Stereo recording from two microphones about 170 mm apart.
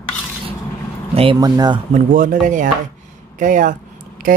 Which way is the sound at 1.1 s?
30° right (ahead or behind).